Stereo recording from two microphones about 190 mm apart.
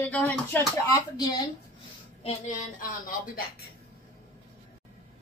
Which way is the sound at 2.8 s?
45° left (ahead or behind).